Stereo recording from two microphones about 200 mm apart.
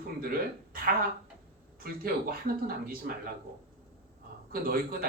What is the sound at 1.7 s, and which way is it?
Speech, 50° right (ahead or behind).